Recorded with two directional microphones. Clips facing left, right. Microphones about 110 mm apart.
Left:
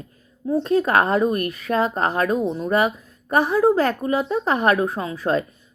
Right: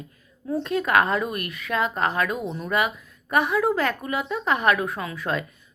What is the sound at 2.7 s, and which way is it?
Speech, 35° left (ahead or behind).